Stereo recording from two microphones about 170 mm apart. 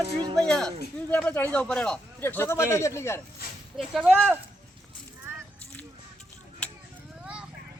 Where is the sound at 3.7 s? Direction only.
Centre (ahead or behind).